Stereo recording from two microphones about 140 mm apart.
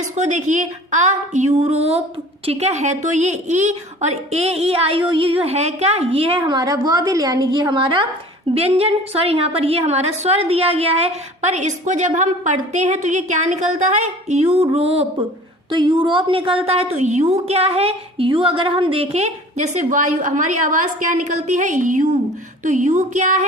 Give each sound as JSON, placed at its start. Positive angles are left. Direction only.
{"t": 0.0, "sound": "a woman's voice", "side_deg": -60}
{"t": 6.5, "sound": "a woman's voice", "side_deg": -25}
{"t": 15.7, "sound": "a woman's voice", "side_deg": -35}